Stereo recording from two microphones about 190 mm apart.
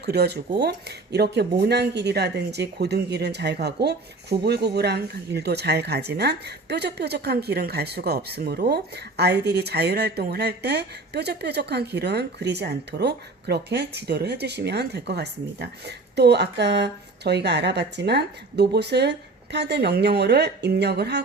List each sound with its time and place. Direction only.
0.0 s speech: 60° right (ahead or behind)